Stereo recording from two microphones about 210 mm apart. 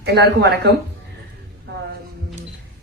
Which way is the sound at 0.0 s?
55° right (ahead or behind).